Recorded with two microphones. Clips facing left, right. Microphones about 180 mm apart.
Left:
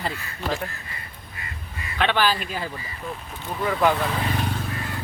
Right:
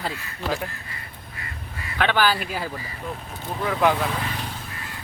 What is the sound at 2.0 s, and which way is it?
Speech, 5° right (ahead or behind).